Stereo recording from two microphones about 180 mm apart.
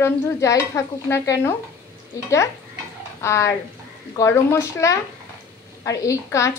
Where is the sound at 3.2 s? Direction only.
15° left (ahead or behind).